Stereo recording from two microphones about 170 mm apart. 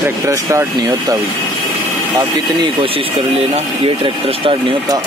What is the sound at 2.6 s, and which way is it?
Speech, 30° right (ahead or behind).